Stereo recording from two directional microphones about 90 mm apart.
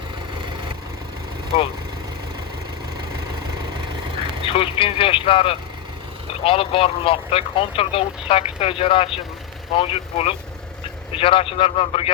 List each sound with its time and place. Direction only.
4.4 s speech: 90° left